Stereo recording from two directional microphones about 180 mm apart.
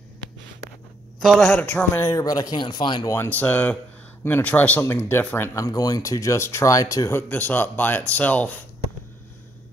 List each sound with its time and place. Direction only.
1.2 s speech: centre (ahead or behind); by 3.2 s 25° left (ahead or behind)
3.2 s speech: 10° left (ahead or behind)